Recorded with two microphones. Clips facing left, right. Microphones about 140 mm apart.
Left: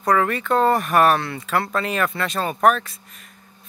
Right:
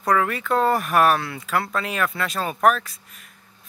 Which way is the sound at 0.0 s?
Centre (ahead or behind).